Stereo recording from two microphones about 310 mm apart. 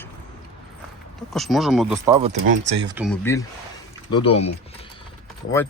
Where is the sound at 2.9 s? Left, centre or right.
Centre.